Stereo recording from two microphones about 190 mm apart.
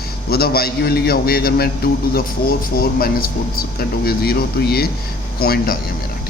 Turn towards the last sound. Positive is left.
turn(degrees=55)  # may be behind; listen again after turning